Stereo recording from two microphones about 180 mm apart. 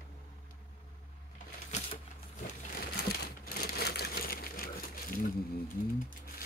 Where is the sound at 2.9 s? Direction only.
60° left (ahead or behind).